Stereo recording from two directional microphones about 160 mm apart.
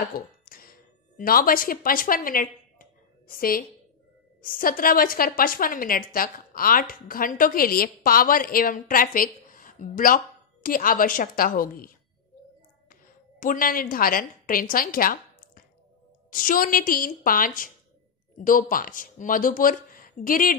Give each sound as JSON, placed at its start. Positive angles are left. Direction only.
{"t": 0.0, "sound": "a sound", "side_deg": 65}
{"t": 4.4, "sound": "a woman's voice", "side_deg": 60}
{"t": 13.4, "sound": "a woman's voice", "side_deg": 60}